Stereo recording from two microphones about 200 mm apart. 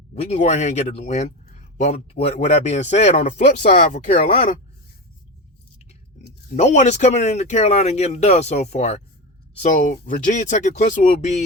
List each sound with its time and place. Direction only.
0.1 s speech: 30° left (ahead or behind)
6.6 s speech: 35° left (ahead or behind)